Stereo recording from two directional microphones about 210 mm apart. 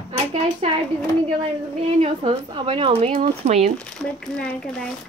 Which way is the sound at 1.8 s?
25° right (ahead or behind).